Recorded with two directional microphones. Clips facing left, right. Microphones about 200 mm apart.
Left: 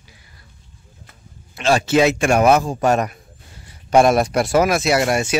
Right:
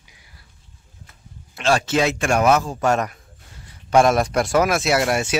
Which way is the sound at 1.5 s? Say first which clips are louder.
Left 3 dB; 5° left (ahead or behind).